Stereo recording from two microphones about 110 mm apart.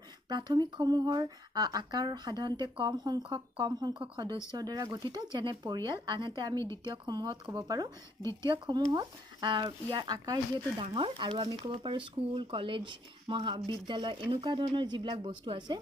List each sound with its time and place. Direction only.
0.3 s speech: 40° right (ahead or behind)
4.5 s speech: 35° right (ahead or behind)
6.6 s a woman's voice: 25° left (ahead or behind)
6.9 s speech: 40° right (ahead or behind)
8.2 s a woman's voice: 25° left (ahead or behind)
8.5 s speech: 40° right (ahead or behind)